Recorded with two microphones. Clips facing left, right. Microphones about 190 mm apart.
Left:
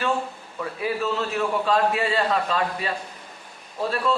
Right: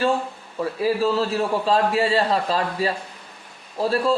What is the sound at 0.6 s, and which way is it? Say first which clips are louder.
A man's voice: right 5 dB; 30° right (ahead or behind).